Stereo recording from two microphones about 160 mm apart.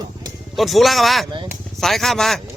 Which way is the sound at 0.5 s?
Centre (ahead or behind).